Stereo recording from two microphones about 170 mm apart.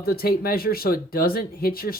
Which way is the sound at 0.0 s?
65° left (ahead or behind).